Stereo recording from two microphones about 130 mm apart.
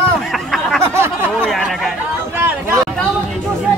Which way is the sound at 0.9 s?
20° right (ahead or behind).